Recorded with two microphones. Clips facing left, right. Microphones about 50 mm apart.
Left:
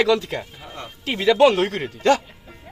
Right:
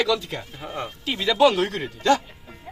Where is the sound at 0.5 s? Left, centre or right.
Centre.